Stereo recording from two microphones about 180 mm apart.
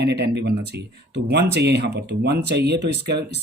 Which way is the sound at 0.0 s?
70° right (ahead or behind).